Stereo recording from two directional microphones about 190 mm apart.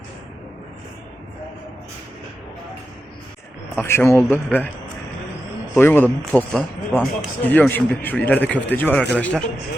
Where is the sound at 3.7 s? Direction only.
15° left (ahead or behind).